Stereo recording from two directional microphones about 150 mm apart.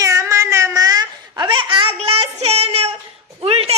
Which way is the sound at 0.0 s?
20° right (ahead or behind).